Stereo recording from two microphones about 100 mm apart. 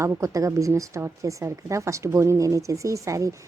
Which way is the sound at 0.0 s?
30° right (ahead or behind).